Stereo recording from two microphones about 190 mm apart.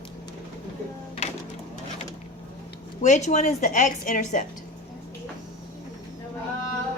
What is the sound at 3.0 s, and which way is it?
A woman's voice, 40° left (ahead or behind).